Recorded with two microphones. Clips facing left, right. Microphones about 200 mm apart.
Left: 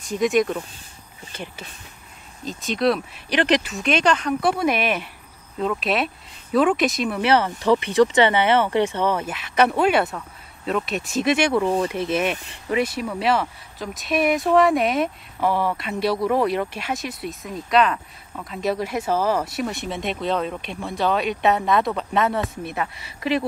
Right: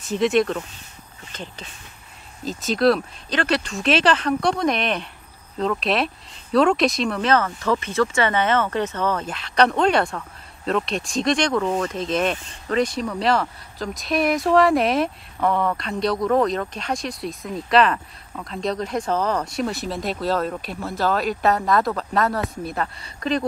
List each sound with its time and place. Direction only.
1.3 s speech: 10° left (ahead or behind)
2.4 s speech: centre (ahead or behind)
3.3 s speech: 15° left (ahead or behind)
3.6 s speech: centre (ahead or behind)
7.2 s speech: 15° left (ahead or behind)